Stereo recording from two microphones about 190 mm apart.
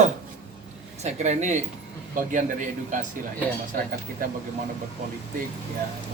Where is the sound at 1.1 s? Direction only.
40° right (ahead or behind).